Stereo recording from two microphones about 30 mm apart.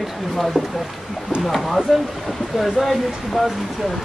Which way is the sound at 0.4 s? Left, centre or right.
Centre.